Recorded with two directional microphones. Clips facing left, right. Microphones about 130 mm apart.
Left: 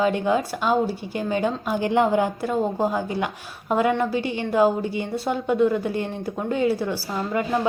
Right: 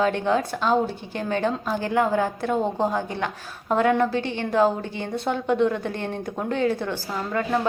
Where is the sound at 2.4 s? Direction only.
5° left (ahead or behind).